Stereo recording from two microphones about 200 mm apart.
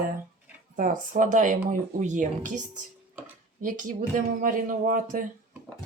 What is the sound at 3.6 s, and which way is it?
Speech, 40° right (ahead or behind).